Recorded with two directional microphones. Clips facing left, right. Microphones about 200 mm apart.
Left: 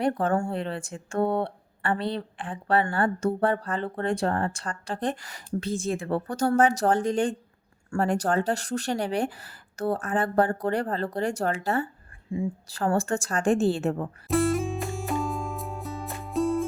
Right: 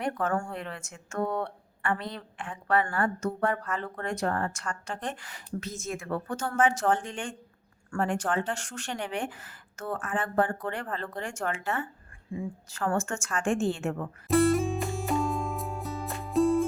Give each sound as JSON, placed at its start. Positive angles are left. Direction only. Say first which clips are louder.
{"t": 0.0, "sound": "speech", "louder": "left 5 dB", "side_deg": 30}
{"t": 14.3, "sound": "music", "louder": "right 1 dB", "side_deg": 0}